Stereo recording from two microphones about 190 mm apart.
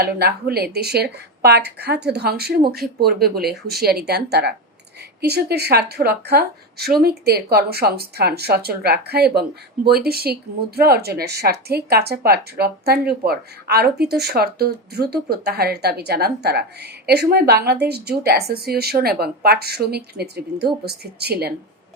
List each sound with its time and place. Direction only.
0.0 s speech: 55° right (ahead or behind)